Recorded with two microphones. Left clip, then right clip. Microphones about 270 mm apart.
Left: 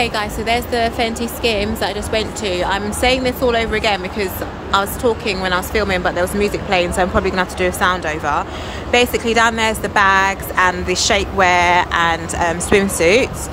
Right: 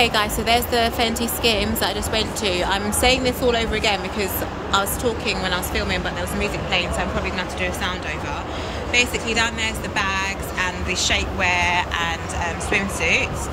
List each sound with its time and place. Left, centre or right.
0.0 s a woman's voice: centre